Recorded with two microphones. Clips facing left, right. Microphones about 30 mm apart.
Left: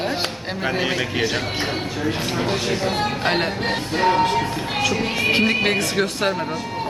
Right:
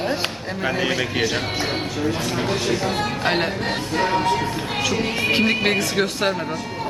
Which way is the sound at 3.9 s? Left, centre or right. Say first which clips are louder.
Left 2 dB; centre.